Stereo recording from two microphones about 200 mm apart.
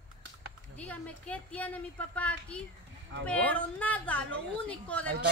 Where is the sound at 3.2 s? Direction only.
5° left (ahead or behind).